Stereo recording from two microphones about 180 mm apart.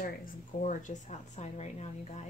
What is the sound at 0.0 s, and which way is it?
Speech, 50° left (ahead or behind).